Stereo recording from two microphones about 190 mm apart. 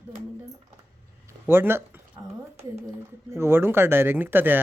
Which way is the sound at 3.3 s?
15° right (ahead or behind).